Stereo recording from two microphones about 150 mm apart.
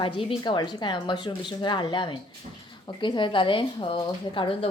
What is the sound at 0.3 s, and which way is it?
Speech, 30° left (ahead or behind).